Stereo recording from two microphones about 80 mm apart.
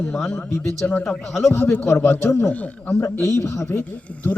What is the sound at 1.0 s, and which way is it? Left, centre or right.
Speech, centre.